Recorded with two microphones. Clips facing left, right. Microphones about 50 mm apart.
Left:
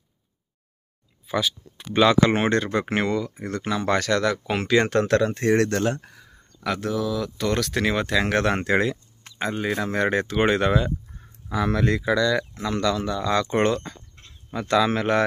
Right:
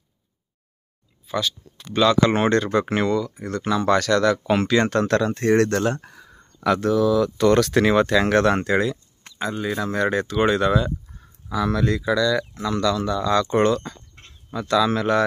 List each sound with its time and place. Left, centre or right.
1.2 s speech: centre
8.4 s speech: centre
9.4 s speech: left
14.2 s a sound: right
14.5 s speech: left